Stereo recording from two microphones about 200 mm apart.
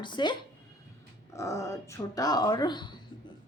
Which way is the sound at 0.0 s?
25° left (ahead or behind).